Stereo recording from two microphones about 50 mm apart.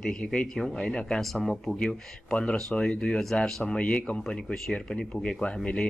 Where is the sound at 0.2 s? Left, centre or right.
Centre.